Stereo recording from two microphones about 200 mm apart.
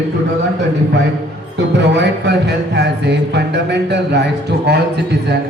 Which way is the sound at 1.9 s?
55° right (ahead or behind).